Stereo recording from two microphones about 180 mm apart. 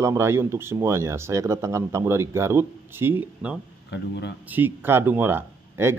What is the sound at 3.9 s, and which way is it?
Speech, 70° left (ahead or behind).